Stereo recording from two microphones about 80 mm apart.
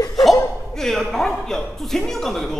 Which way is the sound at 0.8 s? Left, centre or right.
Centre.